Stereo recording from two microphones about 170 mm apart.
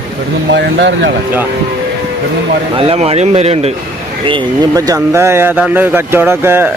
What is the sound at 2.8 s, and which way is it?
Speech, 35° right (ahead or behind).